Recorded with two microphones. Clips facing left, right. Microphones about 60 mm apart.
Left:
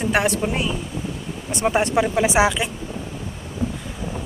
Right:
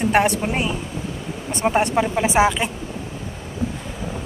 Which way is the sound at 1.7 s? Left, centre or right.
Centre.